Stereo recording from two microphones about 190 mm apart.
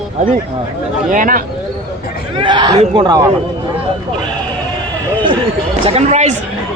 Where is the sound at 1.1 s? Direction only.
45° right (ahead or behind).